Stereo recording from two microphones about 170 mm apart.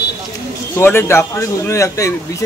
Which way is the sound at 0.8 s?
15° left (ahead or behind).